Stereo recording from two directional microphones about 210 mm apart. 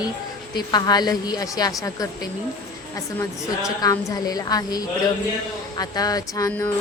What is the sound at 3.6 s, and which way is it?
A woman's voice, 15° left (ahead or behind).